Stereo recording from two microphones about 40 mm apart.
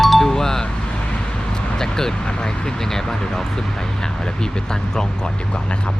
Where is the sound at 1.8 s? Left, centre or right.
Centre.